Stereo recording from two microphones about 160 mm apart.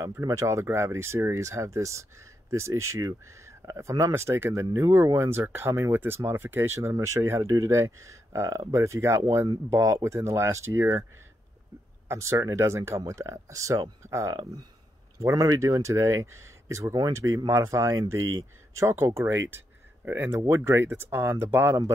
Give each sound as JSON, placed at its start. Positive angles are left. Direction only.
{"t": 0.0, "sound": "speech", "side_deg": -20}
{"t": 12.1, "sound": "speech", "side_deg": -20}